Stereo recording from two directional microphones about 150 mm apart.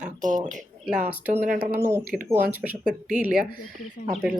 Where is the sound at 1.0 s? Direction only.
15° right (ahead or behind).